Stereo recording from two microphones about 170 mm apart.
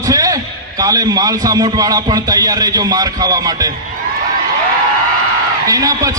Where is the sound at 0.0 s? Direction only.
20° right (ahead or behind).